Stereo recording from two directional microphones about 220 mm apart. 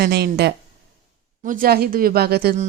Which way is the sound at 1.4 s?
40° right (ahead or behind).